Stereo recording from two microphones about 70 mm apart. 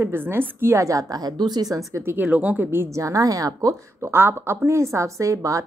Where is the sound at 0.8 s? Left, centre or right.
Right.